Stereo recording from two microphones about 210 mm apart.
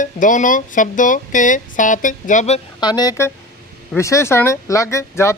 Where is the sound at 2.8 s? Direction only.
20° left (ahead or behind).